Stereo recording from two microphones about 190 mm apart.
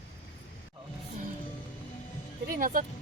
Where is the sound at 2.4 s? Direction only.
45° right (ahead or behind).